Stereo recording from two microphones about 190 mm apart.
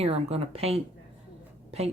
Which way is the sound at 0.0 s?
30° right (ahead or behind).